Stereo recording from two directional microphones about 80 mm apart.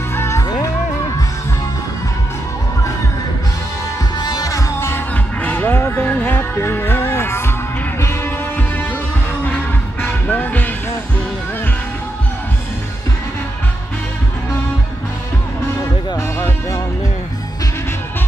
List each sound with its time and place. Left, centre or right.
0.1 s music: left
0.4 s music: left
4.2 s music: left
4.7 s music: left
10.0 s music: left
16.2 s music: left